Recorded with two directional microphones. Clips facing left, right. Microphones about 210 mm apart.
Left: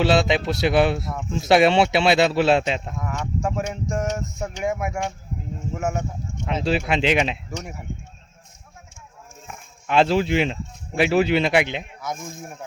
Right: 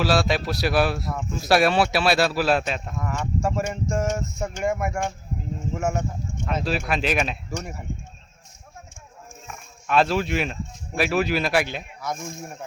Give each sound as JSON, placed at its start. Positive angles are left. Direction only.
{"t": 0.0, "sound": "speech", "side_deg": 20}
{"t": 3.0, "sound": "speech", "side_deg": 0}
{"t": 6.4, "sound": "speech", "side_deg": 25}
{"t": 7.6, "sound": "speech", "side_deg": 5}
{"t": 9.9, "sound": "speech", "side_deg": 25}